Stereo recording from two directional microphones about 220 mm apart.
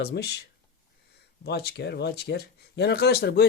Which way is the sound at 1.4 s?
50° left (ahead or behind).